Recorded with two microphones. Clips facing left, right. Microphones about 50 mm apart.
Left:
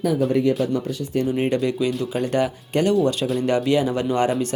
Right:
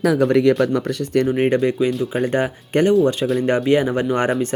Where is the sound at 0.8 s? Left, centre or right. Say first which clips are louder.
Right 5 dB; right.